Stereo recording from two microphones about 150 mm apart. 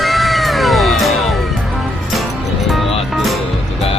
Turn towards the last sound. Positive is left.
turn(degrees=0)  # may be behind; listen again after turning